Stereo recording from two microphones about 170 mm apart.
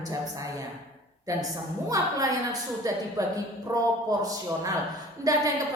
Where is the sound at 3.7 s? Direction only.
20° right (ahead or behind).